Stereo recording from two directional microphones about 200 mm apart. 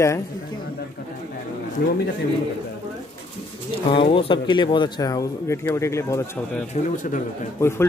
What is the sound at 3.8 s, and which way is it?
Speech, 25° left (ahead or behind).